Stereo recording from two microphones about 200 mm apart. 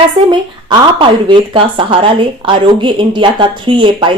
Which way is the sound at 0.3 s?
25° right (ahead or behind).